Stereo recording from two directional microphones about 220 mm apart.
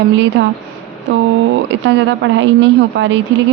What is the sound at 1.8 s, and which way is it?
A woman's voice, 55° right (ahead or behind).